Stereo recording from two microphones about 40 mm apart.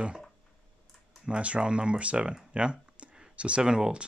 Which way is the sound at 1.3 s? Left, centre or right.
Right.